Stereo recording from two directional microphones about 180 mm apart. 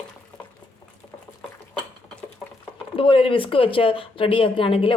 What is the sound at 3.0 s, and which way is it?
A woman's voice, 30° left (ahead or behind).